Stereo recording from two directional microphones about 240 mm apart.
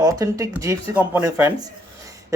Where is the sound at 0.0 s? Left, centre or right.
Centre.